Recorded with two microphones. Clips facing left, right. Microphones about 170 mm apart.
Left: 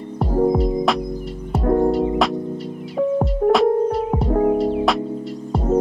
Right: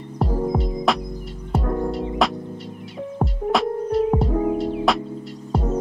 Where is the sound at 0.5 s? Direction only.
Centre (ahead or behind).